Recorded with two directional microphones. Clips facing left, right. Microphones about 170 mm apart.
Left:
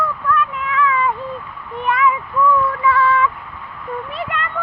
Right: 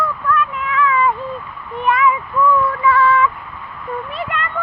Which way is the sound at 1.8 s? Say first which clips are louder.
Right 2 dB; 10° right (ahead or behind).